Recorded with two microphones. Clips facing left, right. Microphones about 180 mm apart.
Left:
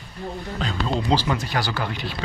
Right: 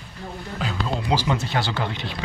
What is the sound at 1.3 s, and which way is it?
Speech, 25° right (ahead or behind).